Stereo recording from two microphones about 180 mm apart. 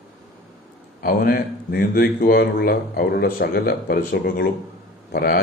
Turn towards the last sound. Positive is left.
turn(degrees=55)  # may be behind; listen again after turning